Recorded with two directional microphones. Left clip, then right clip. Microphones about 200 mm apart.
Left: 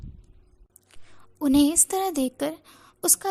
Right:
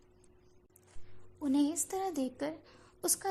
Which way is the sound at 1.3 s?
30° left (ahead or behind).